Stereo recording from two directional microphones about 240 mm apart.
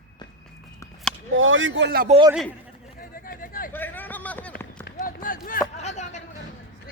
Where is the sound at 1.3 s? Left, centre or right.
Right.